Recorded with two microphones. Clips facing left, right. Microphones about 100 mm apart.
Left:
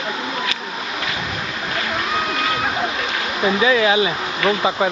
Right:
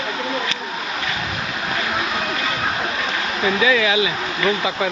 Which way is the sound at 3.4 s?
25° left (ahead or behind).